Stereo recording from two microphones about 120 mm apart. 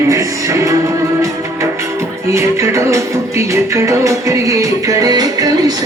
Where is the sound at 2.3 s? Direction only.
25° right (ahead or behind).